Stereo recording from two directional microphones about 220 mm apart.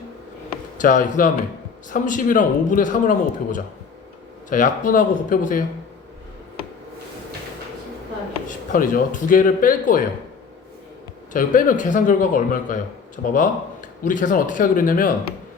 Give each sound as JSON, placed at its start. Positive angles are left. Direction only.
{"t": 0.8, "sound": "a man's voice", "side_deg": 35}
{"t": 8.4, "sound": "a man's voice", "side_deg": 35}
{"t": 11.3, "sound": "a man's voice", "side_deg": 35}